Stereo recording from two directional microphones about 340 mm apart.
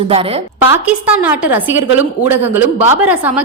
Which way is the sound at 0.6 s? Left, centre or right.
Centre.